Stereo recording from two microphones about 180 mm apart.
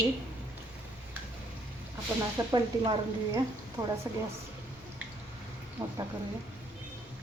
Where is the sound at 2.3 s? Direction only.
20° right (ahead or behind).